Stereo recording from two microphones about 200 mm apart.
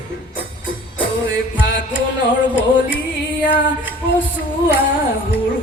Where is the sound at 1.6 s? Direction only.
65° left (ahead or behind).